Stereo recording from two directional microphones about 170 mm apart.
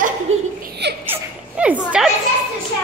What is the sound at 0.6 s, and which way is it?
Giggle, 75° right (ahead or behind).